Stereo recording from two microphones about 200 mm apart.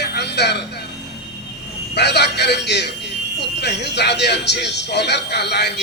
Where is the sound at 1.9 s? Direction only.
55° left (ahead or behind).